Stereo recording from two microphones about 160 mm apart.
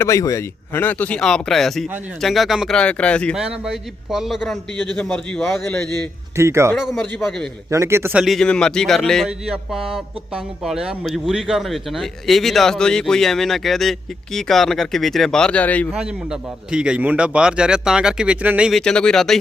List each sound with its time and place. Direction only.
0.0 s speech: 20° left (ahead or behind)
3.3 s speech: 5° right (ahead or behind)
6.3 s a man's voice: 15° right (ahead or behind)
6.9 s speech: 5° left (ahead or behind)
7.7 s a man's voice: 15° right (ahead or behind)
8.2 s speech: centre (ahead or behind)
15.9 s speech: 5° right (ahead or behind)
18.8 s speech: 5° left (ahead or behind)